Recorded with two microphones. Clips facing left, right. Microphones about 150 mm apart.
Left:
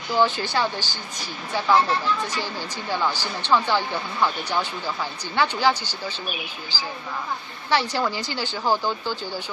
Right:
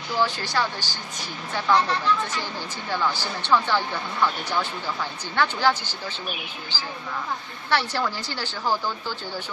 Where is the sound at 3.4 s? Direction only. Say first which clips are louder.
Left 1 dB; 10° left (ahead or behind).